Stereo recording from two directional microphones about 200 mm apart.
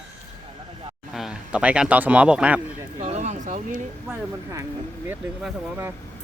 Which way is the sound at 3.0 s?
35° right (ahead or behind).